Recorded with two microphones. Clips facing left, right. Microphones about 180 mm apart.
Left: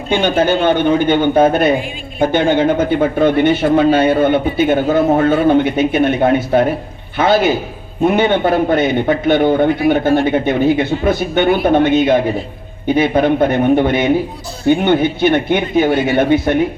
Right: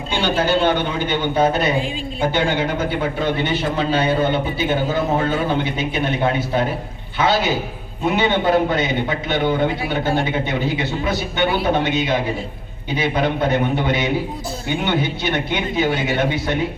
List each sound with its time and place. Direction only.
0.1 s speech: 50° left (ahead or behind)